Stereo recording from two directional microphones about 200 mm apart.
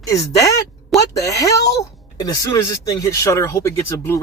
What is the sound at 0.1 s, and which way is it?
A man's voice, 15° left (ahead or behind).